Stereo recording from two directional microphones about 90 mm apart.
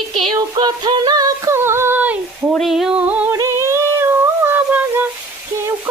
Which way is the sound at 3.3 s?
35° right (ahead or behind).